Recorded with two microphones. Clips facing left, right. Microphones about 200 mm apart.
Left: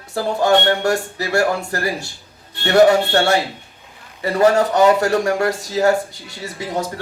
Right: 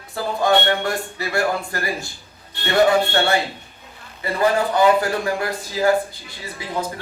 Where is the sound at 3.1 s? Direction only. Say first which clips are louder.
Left 3 dB; 80° left.